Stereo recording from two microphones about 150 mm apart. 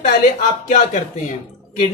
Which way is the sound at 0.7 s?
55° left (ahead or behind).